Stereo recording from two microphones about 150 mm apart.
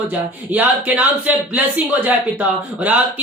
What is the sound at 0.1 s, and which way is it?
Speech, 10° right (ahead or behind).